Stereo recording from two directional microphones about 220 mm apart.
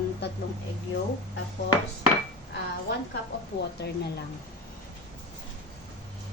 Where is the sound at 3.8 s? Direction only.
50° left (ahead or behind).